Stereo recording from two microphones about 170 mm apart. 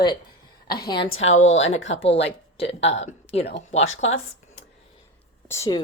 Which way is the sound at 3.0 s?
40° left (ahead or behind).